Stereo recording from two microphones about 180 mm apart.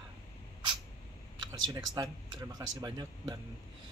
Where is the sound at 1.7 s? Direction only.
20° right (ahead or behind).